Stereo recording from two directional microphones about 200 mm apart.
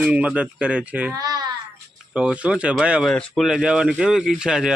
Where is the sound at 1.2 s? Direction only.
20° right (ahead or behind).